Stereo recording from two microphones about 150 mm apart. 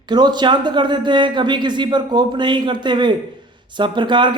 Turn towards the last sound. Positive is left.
turn(degrees=-30)  # may be behind; listen again after turning